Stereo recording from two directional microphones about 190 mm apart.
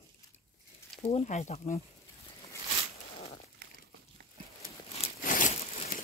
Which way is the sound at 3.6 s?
60° right (ahead or behind).